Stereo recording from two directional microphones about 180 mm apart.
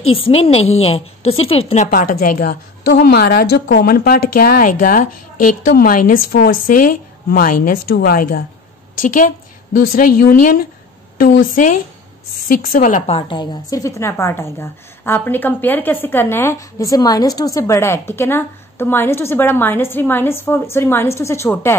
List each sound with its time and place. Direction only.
0.1 s a woman's voice: 30° left (ahead or behind); by 2.9 s 55° left (ahead or behind)
2.9 s a woman's voice: 65° left (ahead or behind)
9.9 s a woman's voice: 50° left (ahead or behind); by 21.7 s 15° left (ahead or behind)